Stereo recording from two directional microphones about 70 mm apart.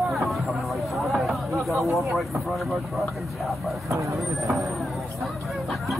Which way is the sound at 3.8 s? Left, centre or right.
Right.